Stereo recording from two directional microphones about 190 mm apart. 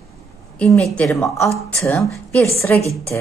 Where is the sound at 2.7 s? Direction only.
10° left (ahead or behind).